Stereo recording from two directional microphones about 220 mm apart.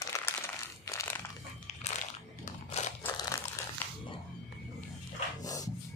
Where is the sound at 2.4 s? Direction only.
30° left (ahead or behind).